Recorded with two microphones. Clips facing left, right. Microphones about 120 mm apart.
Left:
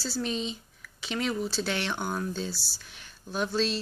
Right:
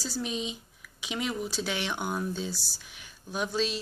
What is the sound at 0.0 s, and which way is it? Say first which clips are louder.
Speech: left 2 dB; 10° right (ahead or behind).